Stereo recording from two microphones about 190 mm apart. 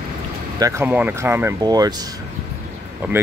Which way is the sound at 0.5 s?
15° right (ahead or behind).